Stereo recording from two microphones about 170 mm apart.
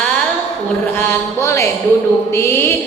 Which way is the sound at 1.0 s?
15° left (ahead or behind).